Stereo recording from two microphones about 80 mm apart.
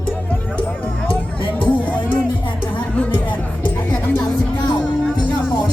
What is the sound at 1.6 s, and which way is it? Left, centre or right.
Music, left.